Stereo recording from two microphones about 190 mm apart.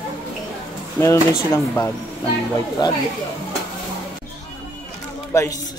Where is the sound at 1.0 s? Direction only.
15° left (ahead or behind).